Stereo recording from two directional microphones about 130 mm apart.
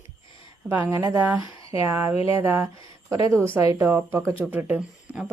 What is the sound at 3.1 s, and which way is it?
Speech, 25° right (ahead or behind).